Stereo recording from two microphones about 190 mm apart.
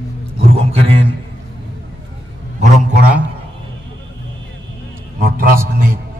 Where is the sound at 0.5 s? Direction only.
30° right (ahead or behind).